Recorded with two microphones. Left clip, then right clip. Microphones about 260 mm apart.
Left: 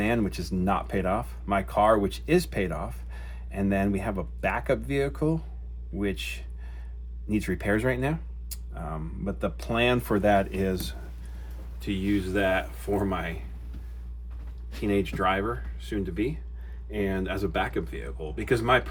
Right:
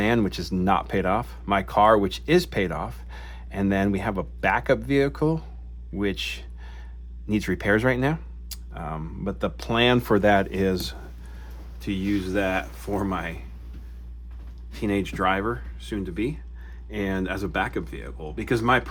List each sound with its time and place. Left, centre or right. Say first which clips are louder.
0.0 s speech: right 4 dB; right
11.8 s speech: right 1 dB; centre
14.8 s speech: right 1 dB; right